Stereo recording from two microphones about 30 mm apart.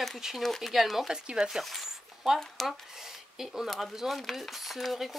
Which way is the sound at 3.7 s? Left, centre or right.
Centre.